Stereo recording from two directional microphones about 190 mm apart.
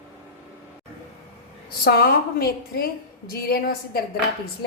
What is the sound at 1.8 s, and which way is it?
A woman's voice, 50° left (ahead or behind).